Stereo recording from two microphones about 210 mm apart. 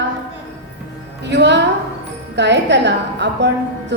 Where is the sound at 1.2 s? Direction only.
55° right (ahead or behind).